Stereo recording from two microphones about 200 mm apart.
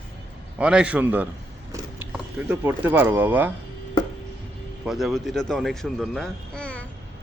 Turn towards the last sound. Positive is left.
turn(degrees=5)  # may be behind; listen again after turning